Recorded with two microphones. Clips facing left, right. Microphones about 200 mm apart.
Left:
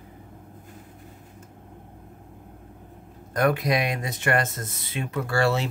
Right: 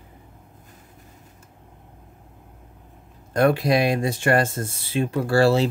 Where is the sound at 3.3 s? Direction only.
30° right (ahead or behind).